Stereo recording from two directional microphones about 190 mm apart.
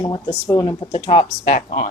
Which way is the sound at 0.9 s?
30° left (ahead or behind).